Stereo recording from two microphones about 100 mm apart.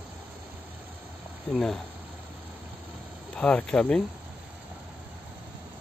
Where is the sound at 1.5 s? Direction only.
5° left (ahead or behind).